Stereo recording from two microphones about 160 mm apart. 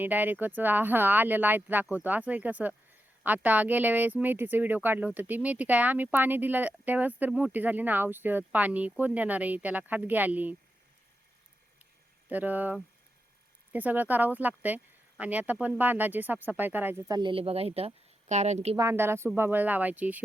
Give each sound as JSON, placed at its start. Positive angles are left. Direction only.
{"t": 0.0, "sound": "speech", "side_deg": -10}
{"t": 12.3, "sound": "speech", "side_deg": -10}
{"t": 17.2, "sound": "speech", "side_deg": -35}
{"t": 18.8, "sound": "speech", "side_deg": -15}